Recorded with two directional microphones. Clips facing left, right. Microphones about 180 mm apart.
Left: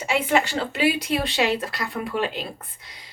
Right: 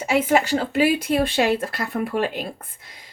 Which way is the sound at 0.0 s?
45° right (ahead or behind).